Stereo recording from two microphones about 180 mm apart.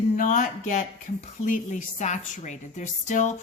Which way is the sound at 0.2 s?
45° left (ahead or behind).